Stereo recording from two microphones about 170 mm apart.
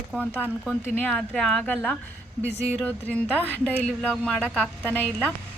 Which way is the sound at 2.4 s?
15° right (ahead or behind).